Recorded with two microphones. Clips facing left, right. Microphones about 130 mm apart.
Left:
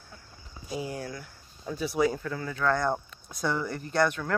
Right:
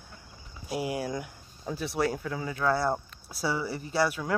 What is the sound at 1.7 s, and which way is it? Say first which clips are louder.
Speech: left 3 dB; centre (ahead or behind).